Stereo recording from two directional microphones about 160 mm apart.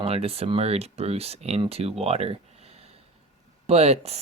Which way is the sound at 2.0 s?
40° right (ahead or behind).